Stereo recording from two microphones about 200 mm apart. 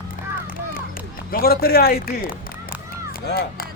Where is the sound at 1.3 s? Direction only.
50° left (ahead or behind).